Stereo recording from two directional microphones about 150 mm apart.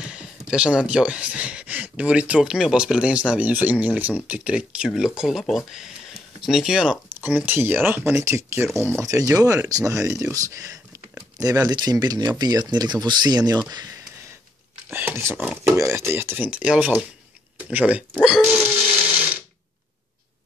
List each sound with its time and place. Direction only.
0.0 s speech: 5° right (ahead or behind); by 13.9 s 25° right (ahead or behind)
14.9 s speech: 15° right (ahead or behind)